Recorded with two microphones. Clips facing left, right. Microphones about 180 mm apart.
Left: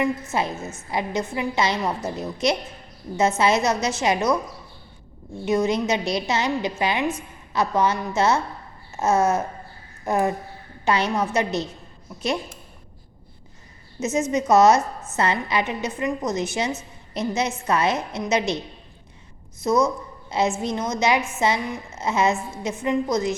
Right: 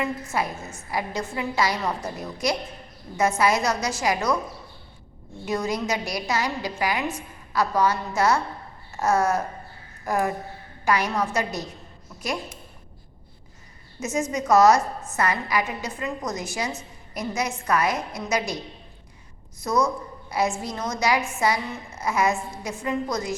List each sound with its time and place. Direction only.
0.0 s a woman's voice: 20° left (ahead or behind)
5.5 s a woman's voice: 20° left (ahead or behind)
14.0 s a woman's voice: 25° left (ahead or behind)
19.6 s a woman's voice: 20° left (ahead or behind)